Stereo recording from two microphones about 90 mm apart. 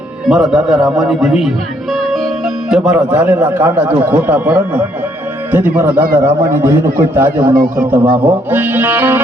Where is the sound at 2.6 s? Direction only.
5° right (ahead or behind).